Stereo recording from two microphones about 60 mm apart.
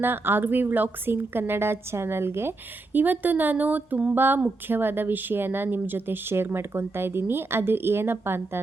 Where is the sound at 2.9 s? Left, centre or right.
Right.